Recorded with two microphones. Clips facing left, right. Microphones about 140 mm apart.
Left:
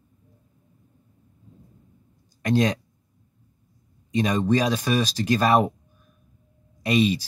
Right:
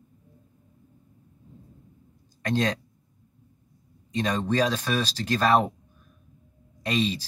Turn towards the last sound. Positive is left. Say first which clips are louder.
# left 5 dB
turn(degrees=10)  # may be behind; listen again after turning